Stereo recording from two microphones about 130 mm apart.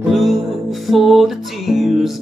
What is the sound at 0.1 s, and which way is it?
Music, centre (ahead or behind).